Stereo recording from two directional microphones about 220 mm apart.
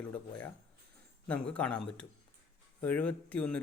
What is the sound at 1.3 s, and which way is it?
Speech, 5° left (ahead or behind).